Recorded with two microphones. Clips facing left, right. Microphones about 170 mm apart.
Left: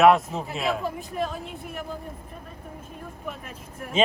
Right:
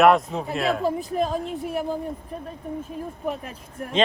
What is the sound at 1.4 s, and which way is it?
Speech, centre (ahead or behind).